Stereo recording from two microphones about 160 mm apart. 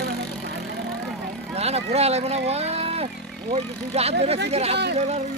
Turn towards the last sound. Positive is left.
turn(degrees=-40)  # may be behind; listen again after turning